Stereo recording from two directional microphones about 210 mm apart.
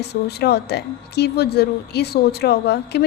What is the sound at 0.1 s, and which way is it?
A woman's voice, 50° left (ahead or behind).